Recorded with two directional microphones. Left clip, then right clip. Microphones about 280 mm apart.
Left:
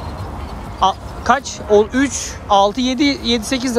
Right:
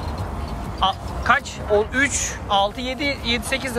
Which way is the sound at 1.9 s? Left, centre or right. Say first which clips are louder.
Left 1 dB; centre.